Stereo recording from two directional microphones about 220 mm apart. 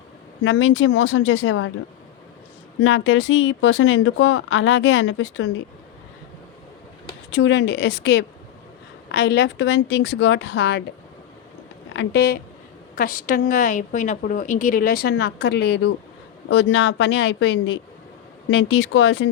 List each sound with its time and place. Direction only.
0.4 s a woman's voice: 55° left (ahead or behind)
2.8 s a woman's voice: 55° left (ahead or behind)
7.3 s speech: 55° left (ahead or behind)
11.9 s a woman's voice: 45° left (ahead or behind)